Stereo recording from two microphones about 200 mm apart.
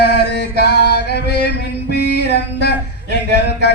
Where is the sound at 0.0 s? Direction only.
55° left (ahead or behind).